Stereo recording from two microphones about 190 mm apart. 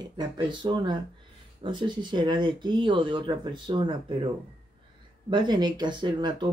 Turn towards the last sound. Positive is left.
turn(degrees=-25)  # may be behind; listen again after turning